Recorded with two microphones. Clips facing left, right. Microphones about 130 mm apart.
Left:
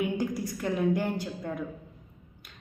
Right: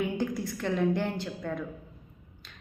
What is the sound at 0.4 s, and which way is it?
A woman's voice, 10° left (ahead or behind).